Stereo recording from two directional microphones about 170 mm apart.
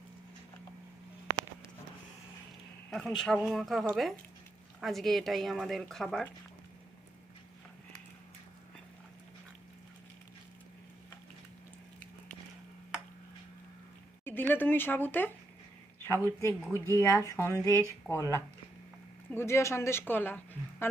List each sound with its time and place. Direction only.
2.9 s speech: 5° left (ahead or behind)
14.3 s speech: 10° left (ahead or behind)